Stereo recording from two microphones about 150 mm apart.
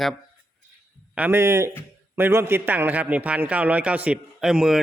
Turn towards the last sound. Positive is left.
turn(degrees=-5)  # may be behind; listen again after turning